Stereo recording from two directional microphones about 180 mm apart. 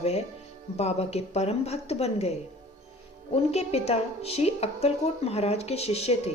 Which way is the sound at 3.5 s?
35° left (ahead or behind).